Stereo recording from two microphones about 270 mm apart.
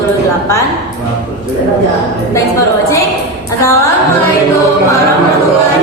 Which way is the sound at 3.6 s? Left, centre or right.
Centre.